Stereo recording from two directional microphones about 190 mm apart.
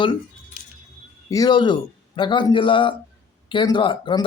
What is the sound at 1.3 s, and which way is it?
Speech, 20° left (ahead or behind).